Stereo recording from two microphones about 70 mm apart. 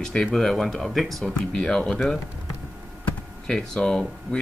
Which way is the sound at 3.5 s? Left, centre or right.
Centre.